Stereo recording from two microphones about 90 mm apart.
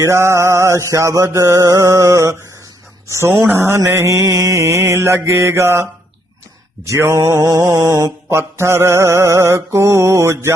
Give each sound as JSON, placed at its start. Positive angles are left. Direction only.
{"t": 0.0, "sound": "mantra", "side_deg": -30}